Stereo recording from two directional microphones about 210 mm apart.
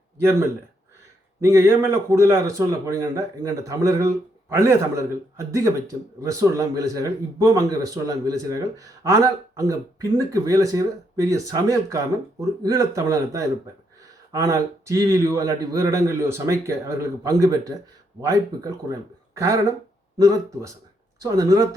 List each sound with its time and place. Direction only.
0.2 s speech: 10° right (ahead or behind)